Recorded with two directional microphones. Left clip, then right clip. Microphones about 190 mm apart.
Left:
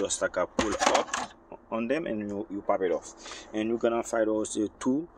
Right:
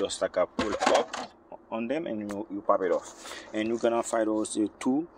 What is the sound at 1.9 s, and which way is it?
Speech, 15° left (ahead or behind).